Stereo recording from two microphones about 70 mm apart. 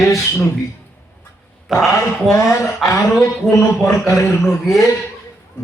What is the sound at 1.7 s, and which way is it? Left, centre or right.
Speech, centre.